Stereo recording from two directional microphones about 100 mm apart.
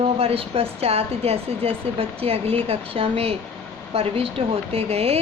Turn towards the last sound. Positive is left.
turn(degrees=-90)